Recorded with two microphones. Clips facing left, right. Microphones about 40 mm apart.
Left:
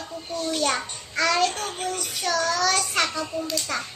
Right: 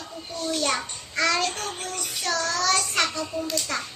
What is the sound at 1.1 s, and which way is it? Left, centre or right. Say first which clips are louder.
Child singing: left 2 dB; centre.